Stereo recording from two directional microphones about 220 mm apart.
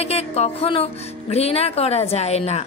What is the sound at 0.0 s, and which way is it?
A woman's voice, 30° left (ahead or behind).